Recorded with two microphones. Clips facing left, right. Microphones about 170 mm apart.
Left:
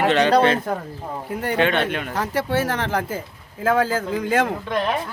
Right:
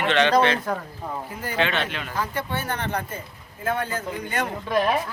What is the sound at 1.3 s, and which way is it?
Speech, 65° left (ahead or behind).